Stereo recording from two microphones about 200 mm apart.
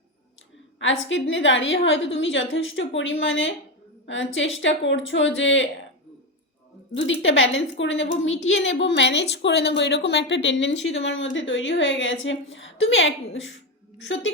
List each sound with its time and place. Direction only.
0.8 s a woman's voice: 70° left (ahead or behind)
6.9 s a woman's voice: 70° left (ahead or behind)